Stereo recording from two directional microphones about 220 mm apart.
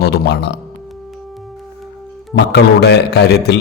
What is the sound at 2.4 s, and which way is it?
A man's voice, 50° left (ahead or behind).